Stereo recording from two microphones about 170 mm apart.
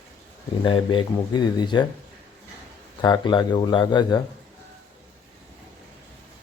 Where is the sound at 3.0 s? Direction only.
25° left (ahead or behind).